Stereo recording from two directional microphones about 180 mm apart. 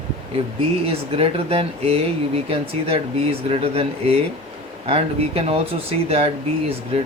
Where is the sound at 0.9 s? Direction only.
30° right (ahead or behind).